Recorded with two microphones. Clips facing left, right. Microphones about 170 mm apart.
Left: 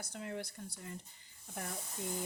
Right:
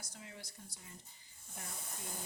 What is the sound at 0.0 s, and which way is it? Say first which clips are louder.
Speech: left 11 dB; 60° left (ahead or behind).